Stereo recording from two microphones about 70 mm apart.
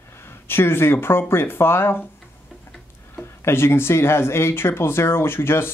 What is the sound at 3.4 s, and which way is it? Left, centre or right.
Speech, left.